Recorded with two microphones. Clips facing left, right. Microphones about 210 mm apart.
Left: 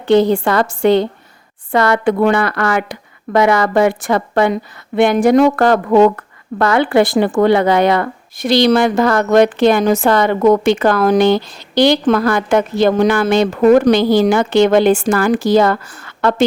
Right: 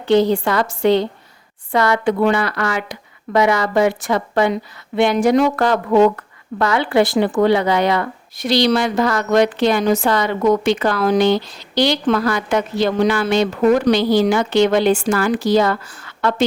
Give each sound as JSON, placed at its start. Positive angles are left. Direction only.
{"t": 0.1, "sound": "a woman's voice", "side_deg": 50}